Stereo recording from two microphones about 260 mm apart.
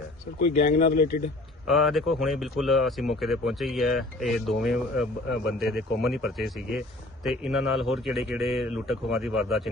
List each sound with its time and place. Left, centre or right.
0.9 s speech: left
1.6 s speech: centre